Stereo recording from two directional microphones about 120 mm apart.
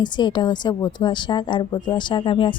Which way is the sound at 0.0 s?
40° left (ahead or behind).